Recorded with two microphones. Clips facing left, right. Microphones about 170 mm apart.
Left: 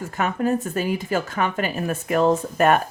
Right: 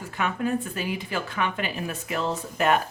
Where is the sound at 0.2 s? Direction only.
45° left (ahead or behind).